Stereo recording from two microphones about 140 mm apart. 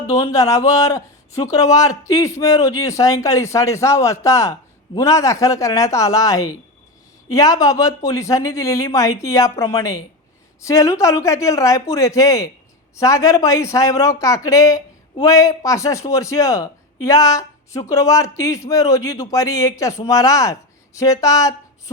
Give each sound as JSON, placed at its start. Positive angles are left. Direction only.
{"t": 0.1, "sound": "a man's voice", "side_deg": 20}